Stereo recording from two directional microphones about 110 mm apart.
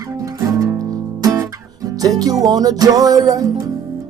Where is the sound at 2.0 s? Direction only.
35° right (ahead or behind).